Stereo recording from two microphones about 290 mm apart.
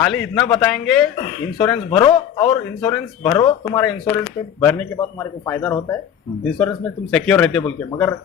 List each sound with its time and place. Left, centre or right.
0.0 s speech: centre
2.0 s speech: centre